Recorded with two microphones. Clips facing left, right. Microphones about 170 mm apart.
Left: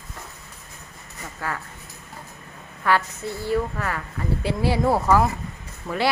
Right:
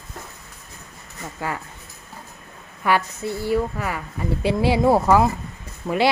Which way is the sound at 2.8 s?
15° right (ahead or behind).